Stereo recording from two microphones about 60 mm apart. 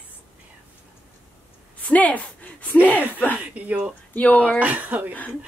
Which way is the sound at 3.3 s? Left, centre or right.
Right.